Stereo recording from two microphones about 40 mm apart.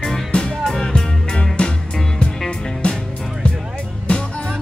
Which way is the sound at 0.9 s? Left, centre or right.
Left.